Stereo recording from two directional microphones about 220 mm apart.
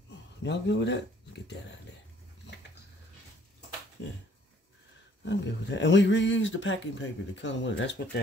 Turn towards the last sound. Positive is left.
turn(degrees=55)  # may be behind; listen again after turning